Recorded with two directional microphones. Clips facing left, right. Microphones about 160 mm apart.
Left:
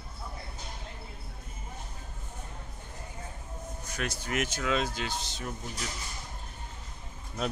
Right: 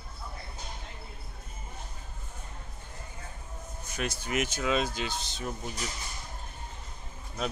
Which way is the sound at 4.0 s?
20° right (ahead or behind).